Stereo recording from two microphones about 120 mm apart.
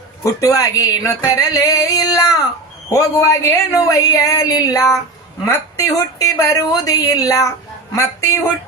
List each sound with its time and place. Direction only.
0.2 s speech: 30° left (ahead or behind)